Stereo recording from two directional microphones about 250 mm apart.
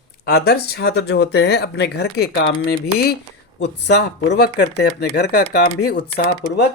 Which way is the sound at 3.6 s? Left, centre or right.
Left.